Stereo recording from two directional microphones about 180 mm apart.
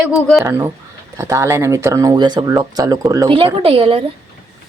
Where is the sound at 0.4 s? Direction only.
15° right (ahead or behind); by 4.0 s 30° right (ahead or behind).